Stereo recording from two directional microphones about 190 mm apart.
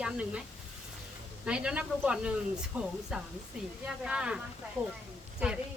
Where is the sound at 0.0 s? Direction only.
5° right (ahead or behind).